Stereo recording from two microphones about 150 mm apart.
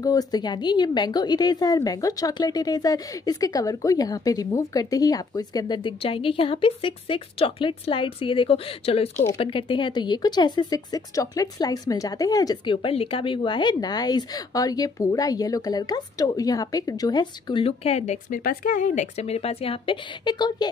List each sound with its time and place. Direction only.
0.0 s a woman's voice: 25° left (ahead or behind)
12.8 s a woman's voice: 40° left (ahead or behind)
18.4 s a woman's voice: 70° left (ahead or behind); by 20.6 s 30° left (ahead or behind)